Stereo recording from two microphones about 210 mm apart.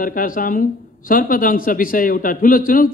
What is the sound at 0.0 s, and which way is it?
A woman's voice, 40° left (ahead or behind).